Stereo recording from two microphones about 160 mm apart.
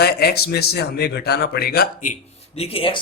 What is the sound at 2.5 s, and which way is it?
Speech, 35° left (ahead or behind).